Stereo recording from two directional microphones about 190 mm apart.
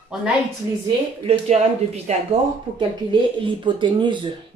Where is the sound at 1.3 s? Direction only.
35° right (ahead or behind).